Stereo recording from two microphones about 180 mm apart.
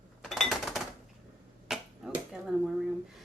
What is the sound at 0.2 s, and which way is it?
Chink, centre (ahead or behind).